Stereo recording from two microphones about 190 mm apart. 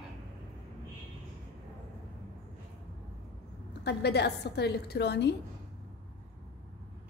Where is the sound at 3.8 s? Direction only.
60° left (ahead or behind).